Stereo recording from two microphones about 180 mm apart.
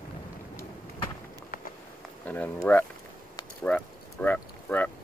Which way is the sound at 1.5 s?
55° left (ahead or behind).